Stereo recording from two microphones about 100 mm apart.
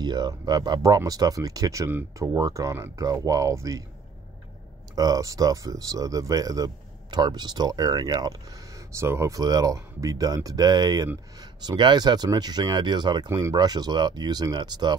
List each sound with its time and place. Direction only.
0.0 s speech: 45° right (ahead or behind)
4.9 s speech: 40° right (ahead or behind)
9.4 s speech: 40° right (ahead or behind)
13.3 s speech: 30° right (ahead or behind)
13.6 s speech: 45° right (ahead or behind)